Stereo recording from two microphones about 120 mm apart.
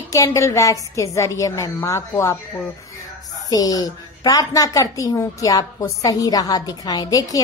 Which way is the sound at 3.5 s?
30° left (ahead or behind).